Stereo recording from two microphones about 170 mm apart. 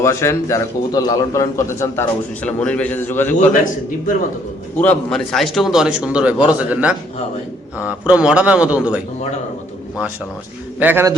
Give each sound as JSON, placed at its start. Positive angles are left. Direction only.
{"t": 0.0, "sound": "a man's voice", "side_deg": 15}
{"t": 4.8, "sound": "a man's voice", "side_deg": 5}
{"t": 10.8, "sound": "a man's voice", "side_deg": -10}